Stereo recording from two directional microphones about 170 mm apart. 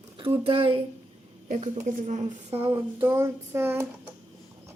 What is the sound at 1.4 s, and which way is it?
Speech, 45° right (ahead or behind).